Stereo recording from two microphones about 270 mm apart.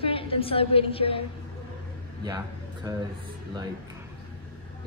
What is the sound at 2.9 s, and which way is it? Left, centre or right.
Speech, centre.